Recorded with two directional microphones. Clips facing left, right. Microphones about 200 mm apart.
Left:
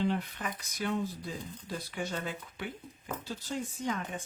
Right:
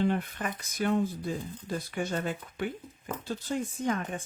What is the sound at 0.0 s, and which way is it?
Speech, 50° right (ahead or behind).